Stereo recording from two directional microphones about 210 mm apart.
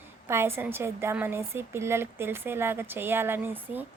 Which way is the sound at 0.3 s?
10° right (ahead or behind).